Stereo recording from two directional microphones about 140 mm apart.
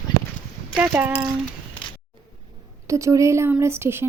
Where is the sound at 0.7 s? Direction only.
15° right (ahead or behind).